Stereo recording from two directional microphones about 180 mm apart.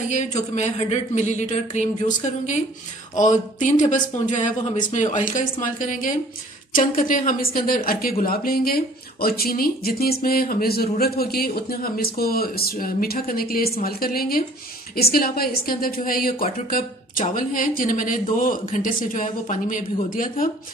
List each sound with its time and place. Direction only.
0.1 s speech: 40° left (ahead or behind)